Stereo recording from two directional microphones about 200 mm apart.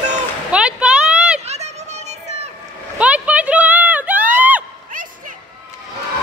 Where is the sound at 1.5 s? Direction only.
30° right (ahead or behind).